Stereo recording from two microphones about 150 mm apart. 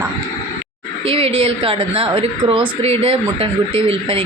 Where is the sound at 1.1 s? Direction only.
40° right (ahead or behind).